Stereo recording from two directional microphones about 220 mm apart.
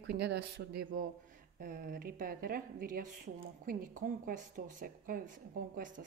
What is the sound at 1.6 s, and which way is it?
Speech, 40° right (ahead or behind).